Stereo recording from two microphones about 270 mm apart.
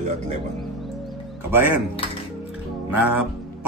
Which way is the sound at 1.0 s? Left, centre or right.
Centre.